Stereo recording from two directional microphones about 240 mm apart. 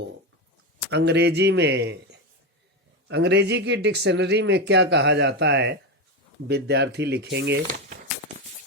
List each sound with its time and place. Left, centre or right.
0.9 s speech: right